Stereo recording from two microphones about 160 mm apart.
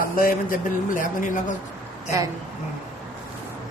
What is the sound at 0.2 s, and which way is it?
Speech, 60° left (ahead or behind).